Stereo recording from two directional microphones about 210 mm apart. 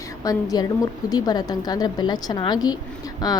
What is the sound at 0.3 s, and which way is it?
A woman's voice, 15° left (ahead or behind).